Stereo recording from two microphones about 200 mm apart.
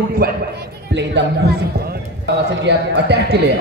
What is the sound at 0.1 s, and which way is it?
A man's voice, 50° right (ahead or behind).